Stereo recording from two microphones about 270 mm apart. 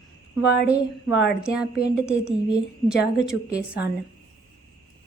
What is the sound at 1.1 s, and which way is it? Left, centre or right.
Speech, left.